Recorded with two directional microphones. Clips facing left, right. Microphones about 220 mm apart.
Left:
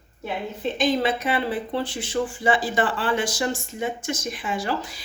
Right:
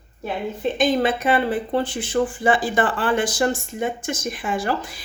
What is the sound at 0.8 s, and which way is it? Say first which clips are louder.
Speech: right 2 dB; 50° right (ahead or behind).